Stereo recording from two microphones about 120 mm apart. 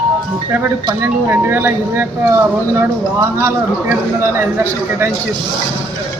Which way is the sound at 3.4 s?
15° right (ahead or behind).